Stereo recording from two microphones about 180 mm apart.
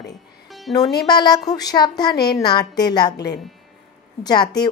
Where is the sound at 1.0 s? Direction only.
25° left (ahead or behind).